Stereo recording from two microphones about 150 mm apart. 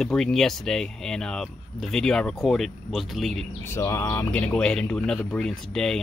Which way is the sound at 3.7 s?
15° left (ahead or behind).